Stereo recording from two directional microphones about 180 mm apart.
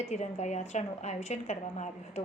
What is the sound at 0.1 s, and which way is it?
A woman's voice, 40° left (ahead or behind).